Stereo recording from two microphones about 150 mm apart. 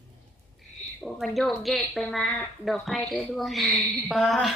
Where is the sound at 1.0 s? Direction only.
Centre (ahead or behind).